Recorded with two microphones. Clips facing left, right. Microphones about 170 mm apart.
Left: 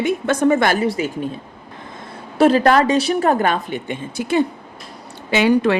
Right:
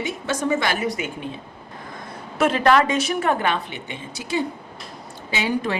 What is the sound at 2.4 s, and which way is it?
A woman's voice, 35° left (ahead or behind).